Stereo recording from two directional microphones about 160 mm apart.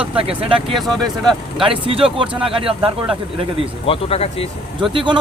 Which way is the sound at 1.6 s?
35° right (ahead or behind).